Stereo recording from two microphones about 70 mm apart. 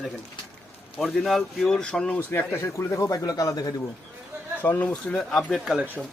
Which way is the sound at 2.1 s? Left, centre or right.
Left.